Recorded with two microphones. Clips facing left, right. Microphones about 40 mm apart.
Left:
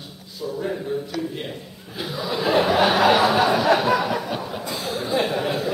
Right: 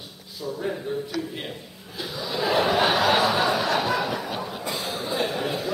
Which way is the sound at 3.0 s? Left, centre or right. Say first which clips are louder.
Left 4 dB; centre.